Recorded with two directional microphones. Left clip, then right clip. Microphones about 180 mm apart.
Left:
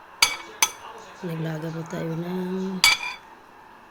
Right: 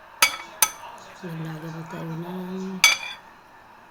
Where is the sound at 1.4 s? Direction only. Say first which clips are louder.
Left 4 dB; 30° left (ahead or behind).